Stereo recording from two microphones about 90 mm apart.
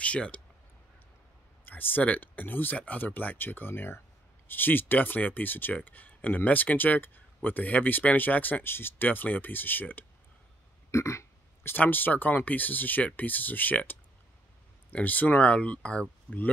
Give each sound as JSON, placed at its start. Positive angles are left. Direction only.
{"t": 0.0, "sound": "speech", "side_deg": 15}
{"t": 1.7, "sound": "speech", "side_deg": 20}
{"t": 10.9, "sound": "a sound", "side_deg": 30}
{"t": 11.7, "sound": "speech", "side_deg": 20}